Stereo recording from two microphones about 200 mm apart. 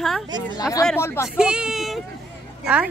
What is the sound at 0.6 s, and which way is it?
Speech, 15° left (ahead or behind).